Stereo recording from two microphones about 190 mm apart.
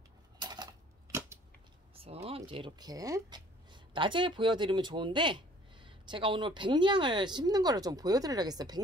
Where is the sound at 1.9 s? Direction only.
30° right (ahead or behind).